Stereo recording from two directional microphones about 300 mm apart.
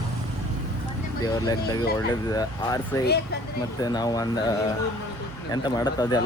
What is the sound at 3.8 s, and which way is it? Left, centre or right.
Speech, centre.